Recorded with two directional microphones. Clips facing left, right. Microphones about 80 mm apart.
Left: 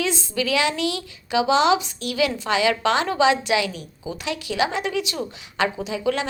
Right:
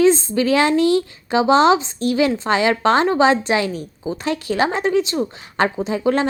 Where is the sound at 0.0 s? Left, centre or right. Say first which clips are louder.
Right 10 dB; right.